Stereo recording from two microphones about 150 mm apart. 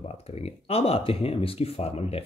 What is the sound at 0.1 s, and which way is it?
Speech, 45° left (ahead or behind).